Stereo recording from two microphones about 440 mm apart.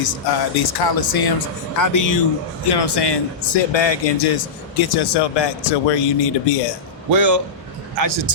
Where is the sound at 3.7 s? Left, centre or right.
Left.